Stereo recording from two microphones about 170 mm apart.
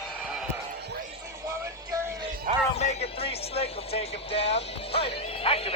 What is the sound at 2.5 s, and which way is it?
Music, 50° right (ahead or behind).